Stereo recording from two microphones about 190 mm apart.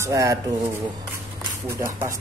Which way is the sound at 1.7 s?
15° right (ahead or behind).